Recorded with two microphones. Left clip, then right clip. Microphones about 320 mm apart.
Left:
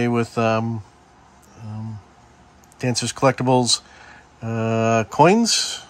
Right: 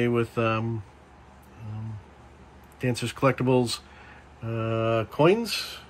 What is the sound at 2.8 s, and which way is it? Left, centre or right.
Speech, centre.